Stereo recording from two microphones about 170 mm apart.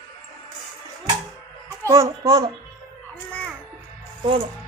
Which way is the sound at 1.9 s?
20° right (ahead or behind).